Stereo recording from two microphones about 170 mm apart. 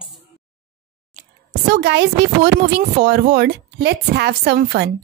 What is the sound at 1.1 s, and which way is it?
Whispering, 50° right (ahead or behind).